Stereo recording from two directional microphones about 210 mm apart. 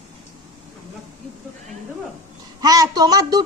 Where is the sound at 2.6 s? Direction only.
15° right (ahead or behind).